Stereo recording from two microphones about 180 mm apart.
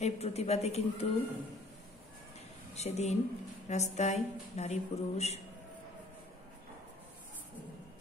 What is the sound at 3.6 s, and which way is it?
Speech, 40° left (ahead or behind).